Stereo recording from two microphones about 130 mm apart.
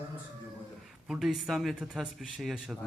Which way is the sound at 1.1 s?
5° right (ahead or behind).